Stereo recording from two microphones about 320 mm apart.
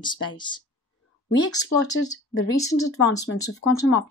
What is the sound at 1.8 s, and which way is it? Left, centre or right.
A woman's voice, left.